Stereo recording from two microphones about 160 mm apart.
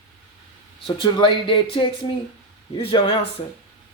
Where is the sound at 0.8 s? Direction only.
30° left (ahead or behind).